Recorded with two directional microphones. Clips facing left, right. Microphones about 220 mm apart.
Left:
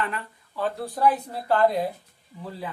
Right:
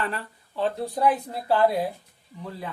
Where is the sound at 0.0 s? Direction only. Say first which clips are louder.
Even; 35° right (ahead or behind).